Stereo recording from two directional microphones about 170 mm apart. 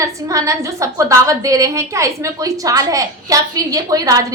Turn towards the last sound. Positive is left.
turn(degrees=-20)  # may be behind; listen again after turning